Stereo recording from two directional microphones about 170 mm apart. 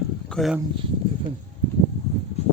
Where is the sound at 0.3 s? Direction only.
Centre (ahead or behind).